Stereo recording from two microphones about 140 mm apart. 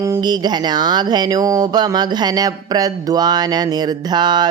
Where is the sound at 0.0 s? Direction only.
25° right (ahead or behind).